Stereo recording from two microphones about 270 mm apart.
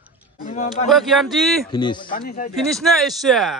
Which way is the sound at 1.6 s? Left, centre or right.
Centre.